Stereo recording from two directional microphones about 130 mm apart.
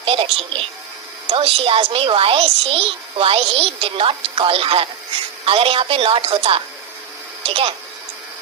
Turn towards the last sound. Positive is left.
turn(degrees=-45)  # may be behind; listen again after turning